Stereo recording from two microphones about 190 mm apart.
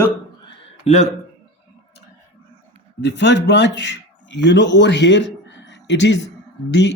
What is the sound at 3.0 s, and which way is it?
Speech, 70° left (ahead or behind).